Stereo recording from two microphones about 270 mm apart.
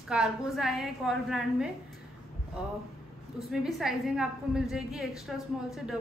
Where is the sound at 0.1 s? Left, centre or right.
Centre.